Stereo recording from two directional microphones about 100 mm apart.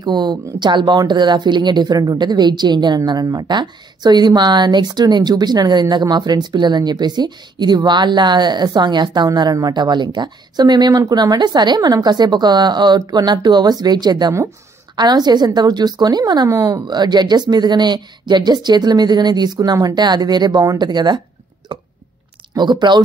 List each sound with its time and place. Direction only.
0.0 s speech: 45° right (ahead or behind)
21.7 s a sound: 50° right (ahead or behind)
22.5 s speech: 50° right (ahead or behind)